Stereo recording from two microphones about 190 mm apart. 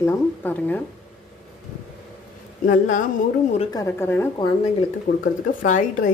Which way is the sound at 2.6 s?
45° left (ahead or behind).